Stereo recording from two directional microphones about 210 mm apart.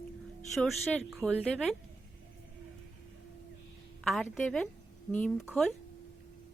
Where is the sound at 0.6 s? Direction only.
Centre (ahead or behind).